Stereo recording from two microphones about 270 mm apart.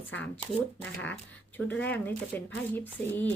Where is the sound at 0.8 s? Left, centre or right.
Centre.